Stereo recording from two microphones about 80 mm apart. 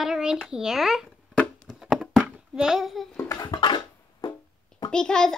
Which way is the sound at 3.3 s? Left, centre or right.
Left.